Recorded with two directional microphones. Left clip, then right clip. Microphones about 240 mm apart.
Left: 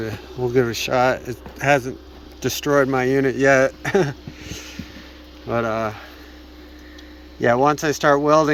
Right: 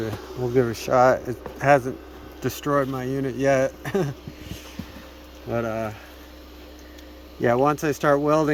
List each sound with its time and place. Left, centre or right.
0.0 s speech: centre
7.4 s speech: centre